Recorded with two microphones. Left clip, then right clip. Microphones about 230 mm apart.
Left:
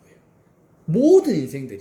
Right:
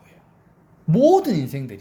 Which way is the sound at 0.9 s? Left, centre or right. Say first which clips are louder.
Even; right.